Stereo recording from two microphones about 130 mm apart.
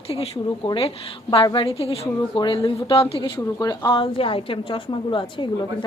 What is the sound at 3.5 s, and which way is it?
A woman's voice, 30° left (ahead or behind).